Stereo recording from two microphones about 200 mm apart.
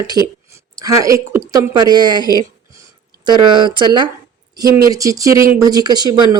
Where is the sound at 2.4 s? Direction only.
20° right (ahead or behind).